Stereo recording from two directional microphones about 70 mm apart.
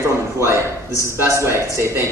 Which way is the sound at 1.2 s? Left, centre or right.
Right.